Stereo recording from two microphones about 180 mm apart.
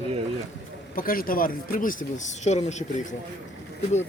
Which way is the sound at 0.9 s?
55° left (ahead or behind).